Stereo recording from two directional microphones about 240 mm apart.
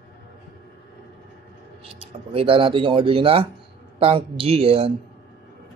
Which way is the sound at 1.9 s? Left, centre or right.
Right.